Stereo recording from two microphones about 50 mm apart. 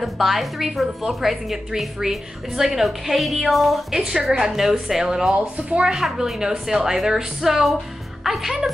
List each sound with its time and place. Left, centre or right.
0.0 s a woman's voice: centre
3.9 s a woman's voice: centre
5.9 s a woman's voice: centre